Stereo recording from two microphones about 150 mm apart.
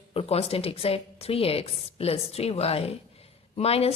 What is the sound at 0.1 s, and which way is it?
A woman's voice, 40° left (ahead or behind).